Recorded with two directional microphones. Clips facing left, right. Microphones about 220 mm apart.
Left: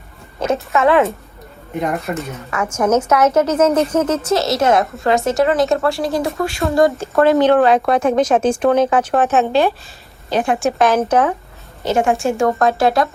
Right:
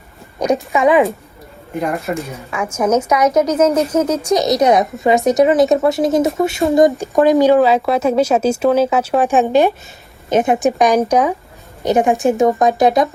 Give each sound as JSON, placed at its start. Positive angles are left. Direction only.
{"t": 0.3, "sound": "speech", "side_deg": -15}
{"t": 1.8, "sound": "speech", "side_deg": 0}
{"t": 4.9, "sound": "speech", "side_deg": 0}
{"t": 5.7, "sound": "speech", "side_deg": -20}